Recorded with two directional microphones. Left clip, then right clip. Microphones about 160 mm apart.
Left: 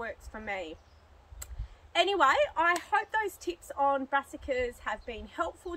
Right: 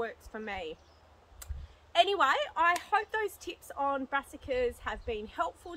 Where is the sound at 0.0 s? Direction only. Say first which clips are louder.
Right 1 dB; 30° right (ahead or behind).